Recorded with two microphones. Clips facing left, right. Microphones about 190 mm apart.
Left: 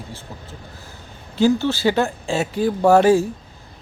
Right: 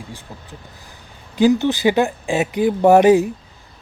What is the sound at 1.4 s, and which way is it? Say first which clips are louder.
Speech: right 2 dB; 15° right (ahead or behind).